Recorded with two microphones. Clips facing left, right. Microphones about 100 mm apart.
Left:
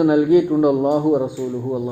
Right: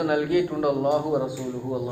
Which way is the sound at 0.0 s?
15° left (ahead or behind).